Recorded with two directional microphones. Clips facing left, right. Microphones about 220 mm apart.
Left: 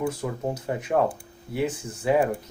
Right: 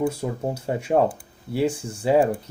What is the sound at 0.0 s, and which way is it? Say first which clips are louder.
Speech: right 3 dB; 30° right (ahead or behind).